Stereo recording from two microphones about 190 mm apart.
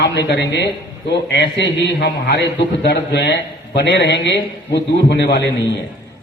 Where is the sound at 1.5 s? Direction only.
60° left (ahead or behind).